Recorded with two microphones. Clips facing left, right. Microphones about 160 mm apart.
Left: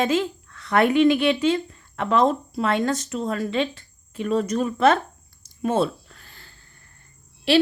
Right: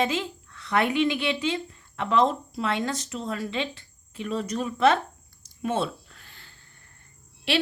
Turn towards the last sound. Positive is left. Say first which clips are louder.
# left 8 dB
turn(degrees=40)  # may be behind; listen again after turning